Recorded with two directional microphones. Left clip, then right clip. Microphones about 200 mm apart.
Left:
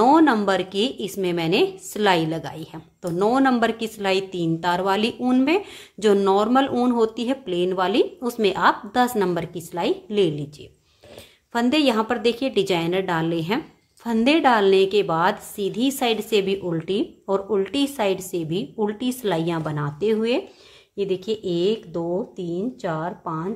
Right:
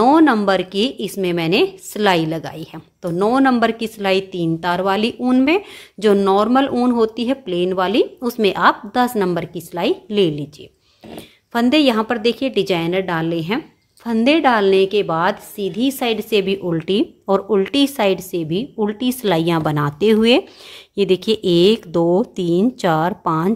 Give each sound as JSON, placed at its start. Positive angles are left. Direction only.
{"t": 0.0, "sound": "a woman's voice", "side_deg": -15}
{"t": 11.5, "sound": "a woman's voice", "side_deg": -20}